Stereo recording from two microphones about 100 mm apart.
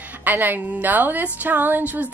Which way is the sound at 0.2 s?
20° right (ahead or behind).